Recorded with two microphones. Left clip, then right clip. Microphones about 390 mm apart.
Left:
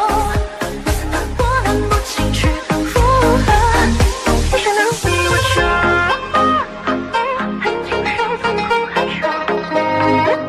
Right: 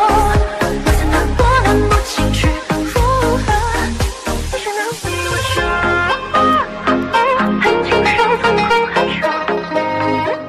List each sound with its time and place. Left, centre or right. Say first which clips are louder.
0.0 s music: right 4 dB; right
0.8 s music: right 5 dB; right
3.2 s music: left 2 dB; left
3.7 s music: left 4 dB; left
5.3 s music: even; left; by 6.1 s centre
6.3 s music: right 2 dB; centre
6.9 s music: right 5 dB; right
8.9 s music: right 2 dB; right
9.8 s music: left 4 dB; centre